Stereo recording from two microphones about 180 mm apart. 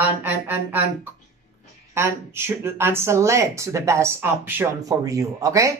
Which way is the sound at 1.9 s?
15° right (ahead or behind).